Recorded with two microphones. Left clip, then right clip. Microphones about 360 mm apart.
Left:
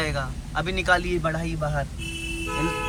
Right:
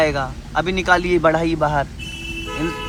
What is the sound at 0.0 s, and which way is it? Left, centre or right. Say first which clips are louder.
A man's voice: right 10 dB; centre.